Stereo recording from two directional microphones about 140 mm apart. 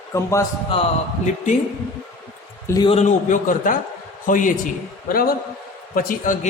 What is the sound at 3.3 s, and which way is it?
A man's voice, 70° left (ahead or behind).